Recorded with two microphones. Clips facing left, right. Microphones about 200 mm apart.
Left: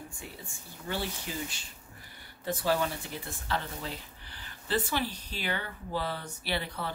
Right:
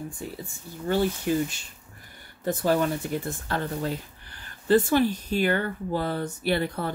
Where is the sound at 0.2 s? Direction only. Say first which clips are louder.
Right 9 dB; 40° right (ahead or behind).